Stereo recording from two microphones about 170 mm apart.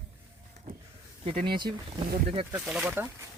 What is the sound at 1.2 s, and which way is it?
Speech, 35° right (ahead or behind).